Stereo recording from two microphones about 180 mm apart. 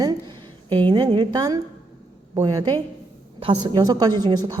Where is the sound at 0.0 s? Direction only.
20° right (ahead or behind).